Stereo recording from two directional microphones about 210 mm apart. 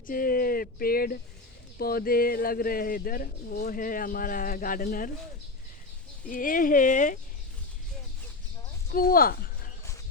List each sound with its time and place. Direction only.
0.1 s speech: 45° left (ahead or behind)
6.2 s speech: 40° left (ahead or behind)
8.9 s speech: 45° left (ahead or behind)